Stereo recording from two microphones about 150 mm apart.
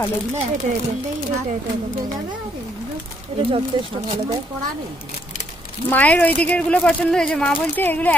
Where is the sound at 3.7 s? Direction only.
30° right (ahead or behind).